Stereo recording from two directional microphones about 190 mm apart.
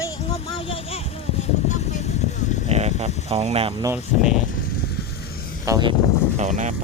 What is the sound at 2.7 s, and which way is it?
Speech, 35° right (ahead or behind).